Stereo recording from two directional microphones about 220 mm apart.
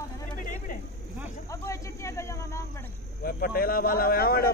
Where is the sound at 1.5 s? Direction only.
15° left (ahead or behind).